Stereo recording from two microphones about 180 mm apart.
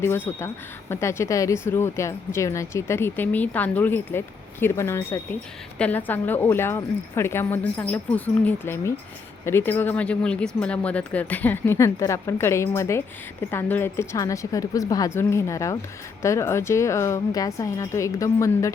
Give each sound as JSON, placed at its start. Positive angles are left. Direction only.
{"t": 0.0, "sound": "speech", "side_deg": 15}